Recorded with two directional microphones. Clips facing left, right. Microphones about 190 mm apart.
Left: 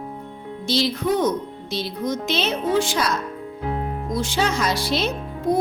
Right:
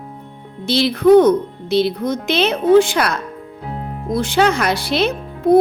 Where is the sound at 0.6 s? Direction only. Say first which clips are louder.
Right 9 dB; 60° right (ahead or behind).